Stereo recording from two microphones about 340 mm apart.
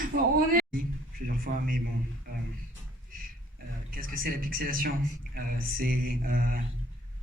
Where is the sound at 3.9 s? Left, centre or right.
Right.